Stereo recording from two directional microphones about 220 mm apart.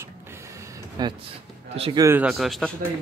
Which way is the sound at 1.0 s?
20° right (ahead or behind).